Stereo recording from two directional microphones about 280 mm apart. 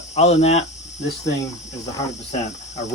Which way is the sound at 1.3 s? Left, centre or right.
Centre.